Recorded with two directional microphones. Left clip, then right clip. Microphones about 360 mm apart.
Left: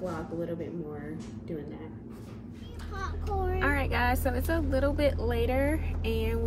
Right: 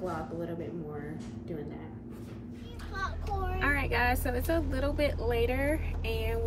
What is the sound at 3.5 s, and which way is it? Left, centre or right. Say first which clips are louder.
Speech: right 1 dB; centre.